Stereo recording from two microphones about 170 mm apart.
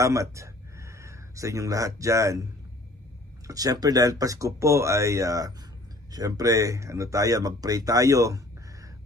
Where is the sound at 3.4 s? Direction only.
20° right (ahead or behind).